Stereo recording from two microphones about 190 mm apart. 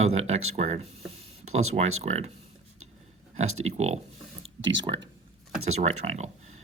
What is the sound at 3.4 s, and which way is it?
Speech, 90° right.